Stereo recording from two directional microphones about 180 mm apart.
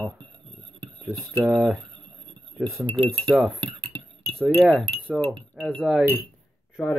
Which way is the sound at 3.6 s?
25° right (ahead or behind).